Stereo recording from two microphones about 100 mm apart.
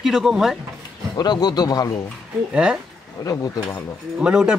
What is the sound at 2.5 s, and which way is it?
Speech, 10° right (ahead or behind).